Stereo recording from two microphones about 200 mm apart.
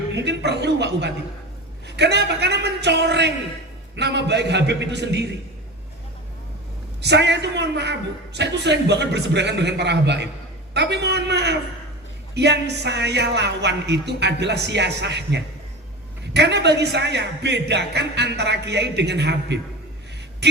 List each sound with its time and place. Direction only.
0.1 s a sound: 60° right (ahead or behind)
2.0 s speech: 60° right (ahead or behind)
7.0 s speech: 60° right (ahead or behind)